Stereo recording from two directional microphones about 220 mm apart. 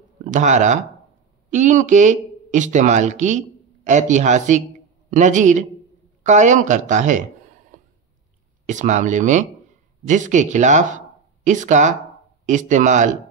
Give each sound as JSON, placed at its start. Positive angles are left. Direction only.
{"t": 0.3, "sound": "speech", "side_deg": -35}
{"t": 7.7, "sound": "a sound", "side_deg": -35}
{"t": 8.6, "sound": "speech", "side_deg": -35}